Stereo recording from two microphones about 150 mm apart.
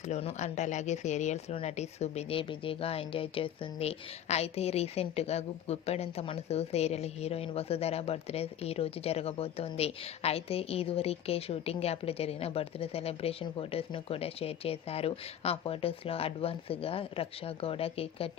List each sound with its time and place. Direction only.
0.0 s speech: 45° left (ahead or behind)